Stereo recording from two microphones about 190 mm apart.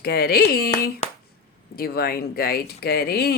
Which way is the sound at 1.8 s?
55° left (ahead or behind).